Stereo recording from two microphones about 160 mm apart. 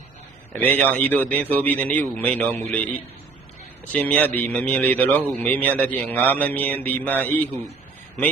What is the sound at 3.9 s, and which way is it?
A man's voice, 10° left (ahead or behind).